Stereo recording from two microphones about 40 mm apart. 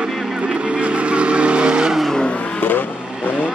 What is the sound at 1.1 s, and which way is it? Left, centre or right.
Vehicle, right.